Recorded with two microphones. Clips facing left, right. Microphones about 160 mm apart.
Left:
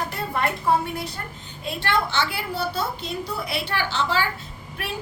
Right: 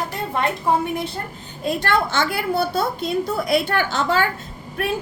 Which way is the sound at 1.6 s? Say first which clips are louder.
Right 4 dB; 45° right (ahead or behind).